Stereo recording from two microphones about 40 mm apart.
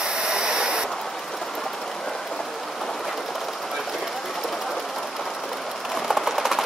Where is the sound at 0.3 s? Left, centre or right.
Centre.